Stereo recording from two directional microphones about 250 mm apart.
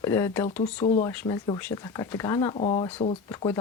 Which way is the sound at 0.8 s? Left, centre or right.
Left.